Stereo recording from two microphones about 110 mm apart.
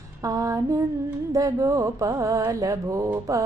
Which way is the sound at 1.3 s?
30° right (ahead or behind).